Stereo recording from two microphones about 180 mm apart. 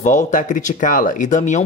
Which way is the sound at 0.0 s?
45° left (ahead or behind).